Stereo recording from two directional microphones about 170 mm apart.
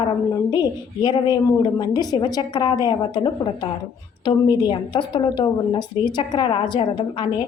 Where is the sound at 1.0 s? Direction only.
25° left (ahead or behind).